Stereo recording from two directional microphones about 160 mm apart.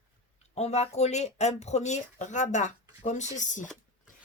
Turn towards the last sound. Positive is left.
turn(degrees=50)  # may be behind; listen again after turning